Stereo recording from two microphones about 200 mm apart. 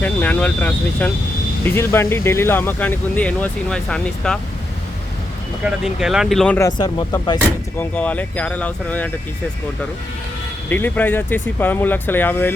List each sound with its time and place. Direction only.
0.0 s speech: 5° left (ahead or behind)
5.6 s speech: centre (ahead or behind)
6.6 s speech: 20° left (ahead or behind)
7.8 s speech: 10° left (ahead or behind)
10.7 s speech: 10° left (ahead or behind)